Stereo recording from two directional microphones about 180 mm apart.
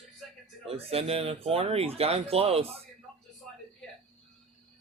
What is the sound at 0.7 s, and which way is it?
Speech, 35° right (ahead or behind).